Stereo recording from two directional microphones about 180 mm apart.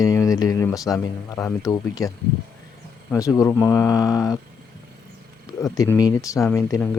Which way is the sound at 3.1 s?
20° left (ahead or behind).